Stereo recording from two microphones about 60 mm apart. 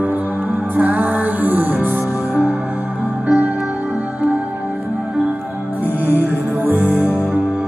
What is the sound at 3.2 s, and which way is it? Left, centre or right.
Music, right.